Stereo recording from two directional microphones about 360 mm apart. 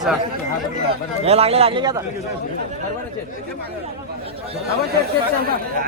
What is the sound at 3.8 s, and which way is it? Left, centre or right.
Speech, centre.